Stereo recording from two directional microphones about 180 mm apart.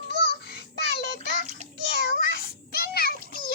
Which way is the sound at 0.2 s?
65° left (ahead or behind).